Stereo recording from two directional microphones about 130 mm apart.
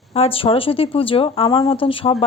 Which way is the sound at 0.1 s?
50° left (ahead or behind).